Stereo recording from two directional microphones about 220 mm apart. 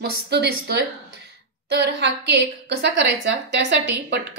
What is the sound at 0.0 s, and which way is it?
A woman's voice, 50° right (ahead or behind).